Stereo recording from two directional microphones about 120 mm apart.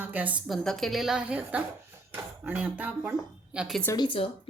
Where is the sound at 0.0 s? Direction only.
15° right (ahead or behind).